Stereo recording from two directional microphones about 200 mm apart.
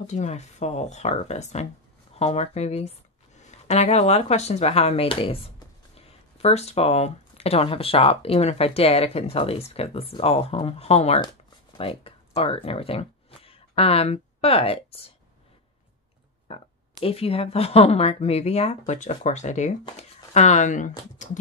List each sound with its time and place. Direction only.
0.0 s speech: 35° left (ahead or behind)
16.5 s speech: 30° left (ahead or behind)